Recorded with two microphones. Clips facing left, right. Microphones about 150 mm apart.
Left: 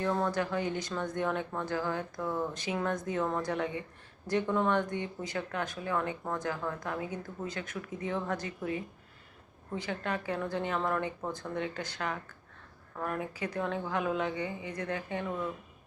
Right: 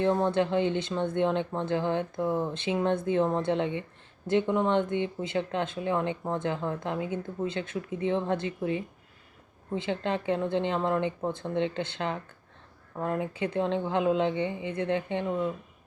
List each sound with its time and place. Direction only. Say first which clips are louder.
0.0 s speech: right 6 dB; 20° right (ahead or behind)